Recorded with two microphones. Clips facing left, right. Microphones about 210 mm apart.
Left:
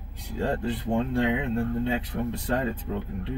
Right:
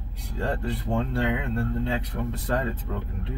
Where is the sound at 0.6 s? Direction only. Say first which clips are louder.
Left 1 dB; 15° left (ahead or behind).